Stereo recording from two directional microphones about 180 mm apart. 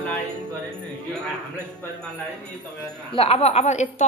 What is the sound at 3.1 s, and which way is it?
Speech, 30° left (ahead or behind).